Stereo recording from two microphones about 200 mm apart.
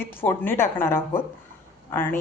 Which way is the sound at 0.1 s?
10° left (ahead or behind).